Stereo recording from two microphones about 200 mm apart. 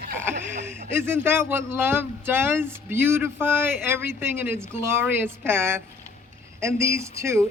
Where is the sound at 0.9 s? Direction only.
10° right (ahead or behind).